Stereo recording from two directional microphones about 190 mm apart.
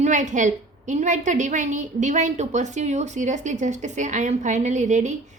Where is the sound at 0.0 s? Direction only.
40° right (ahead or behind).